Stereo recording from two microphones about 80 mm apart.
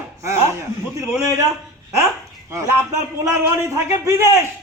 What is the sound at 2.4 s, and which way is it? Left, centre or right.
A man's voice, right.